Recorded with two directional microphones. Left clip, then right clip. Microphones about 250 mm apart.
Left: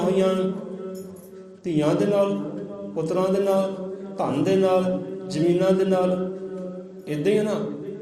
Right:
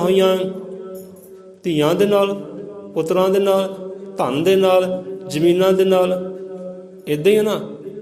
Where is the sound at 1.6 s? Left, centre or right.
Right.